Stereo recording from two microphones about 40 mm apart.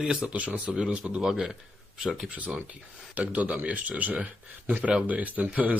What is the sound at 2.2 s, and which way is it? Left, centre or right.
Speech, right.